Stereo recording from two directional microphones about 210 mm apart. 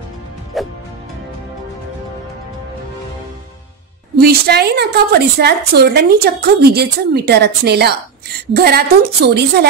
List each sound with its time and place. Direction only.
0.5 s music: centre (ahead or behind)
4.2 s a woman's voice: 50° right (ahead or behind)